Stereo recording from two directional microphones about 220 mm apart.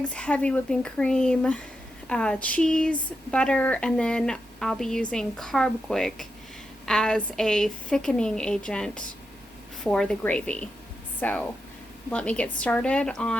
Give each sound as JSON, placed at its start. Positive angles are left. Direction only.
{"t": 0.0, "sound": "speech", "side_deg": 5}